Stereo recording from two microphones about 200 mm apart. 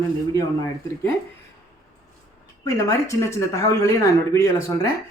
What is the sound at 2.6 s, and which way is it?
Speech, 15° left (ahead or behind).